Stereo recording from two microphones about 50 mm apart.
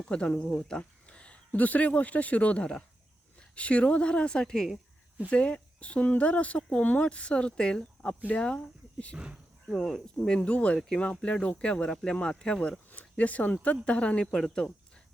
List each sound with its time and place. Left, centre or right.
0.1 s speech: left
5.3 s speech: left
9.1 s speech: centre
9.6 s speech: centre
10.2 s speech: centre
12.9 s speech: left
14.3 s speech: centre